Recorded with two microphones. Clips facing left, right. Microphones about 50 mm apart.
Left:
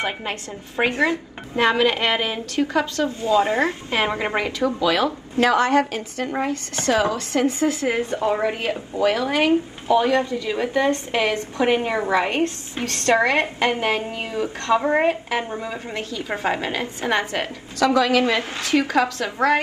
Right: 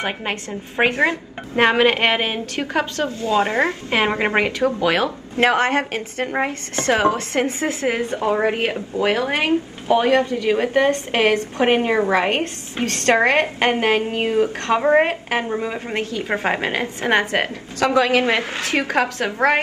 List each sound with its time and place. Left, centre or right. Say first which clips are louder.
0.0 s a woman's voice: right 2 dB; right
14.8 s speech: right 8 dB; right
15.0 s a woman's voice: left 1 dB; right
15.5 s a woman's voice: right 5 dB; right
15.9 s speech: right 5 dB; right